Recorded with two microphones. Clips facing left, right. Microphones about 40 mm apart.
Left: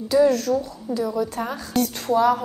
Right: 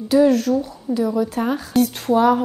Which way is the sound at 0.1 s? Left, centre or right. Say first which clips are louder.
Right 3 dB; centre.